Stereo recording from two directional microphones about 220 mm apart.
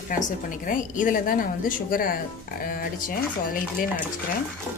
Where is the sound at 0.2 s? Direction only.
35° left (ahead or behind).